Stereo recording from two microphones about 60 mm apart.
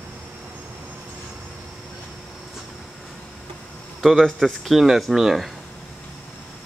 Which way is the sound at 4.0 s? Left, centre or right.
Centre.